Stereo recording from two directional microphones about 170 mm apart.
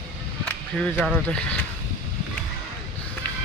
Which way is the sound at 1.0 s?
5° left (ahead or behind).